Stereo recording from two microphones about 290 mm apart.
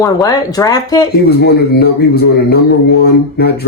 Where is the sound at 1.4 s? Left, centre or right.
Left.